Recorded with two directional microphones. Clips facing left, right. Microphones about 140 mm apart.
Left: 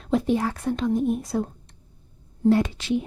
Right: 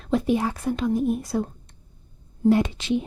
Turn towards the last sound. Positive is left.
turn(degrees=-20)  # may be behind; listen again after turning